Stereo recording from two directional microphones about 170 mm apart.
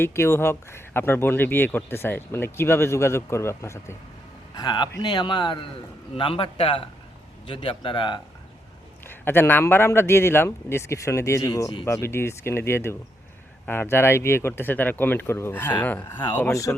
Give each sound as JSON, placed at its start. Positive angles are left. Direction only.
{"t": 0.0, "sound": "speech", "side_deg": 15}
{"t": 4.5, "sound": "a man's voice", "side_deg": 25}
{"t": 9.0, "sound": "speech", "side_deg": 15}